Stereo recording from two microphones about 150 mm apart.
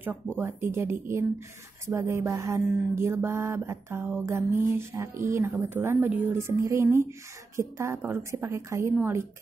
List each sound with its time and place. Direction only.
0.4 s a woman's voice: 15° right (ahead or behind)